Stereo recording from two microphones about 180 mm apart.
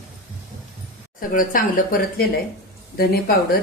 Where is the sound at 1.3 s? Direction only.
50° left (ahead or behind).